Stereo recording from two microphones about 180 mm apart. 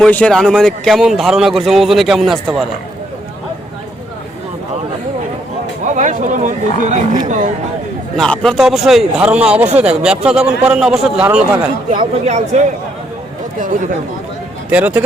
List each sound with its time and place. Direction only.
0.0 s speech: 5° left (ahead or behind)
5.9 s speech: 45° right (ahead or behind)
8.1 s speech: 5° left (ahead or behind)
11.9 s speech: 40° right (ahead or behind)
14.7 s speech: 10° right (ahead or behind)